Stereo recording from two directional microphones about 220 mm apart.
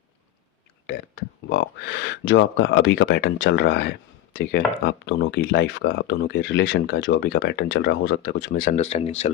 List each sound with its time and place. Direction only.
0.9 s speech: 45° left (ahead or behind); by 9.3 s 30° left (ahead or behind)